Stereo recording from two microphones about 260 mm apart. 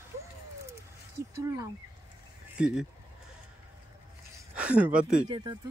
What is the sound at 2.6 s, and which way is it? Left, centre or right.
Speech, centre.